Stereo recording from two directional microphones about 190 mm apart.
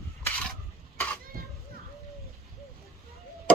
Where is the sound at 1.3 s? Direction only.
50° right (ahead or behind).